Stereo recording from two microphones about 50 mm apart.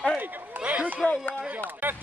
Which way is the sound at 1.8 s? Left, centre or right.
Right.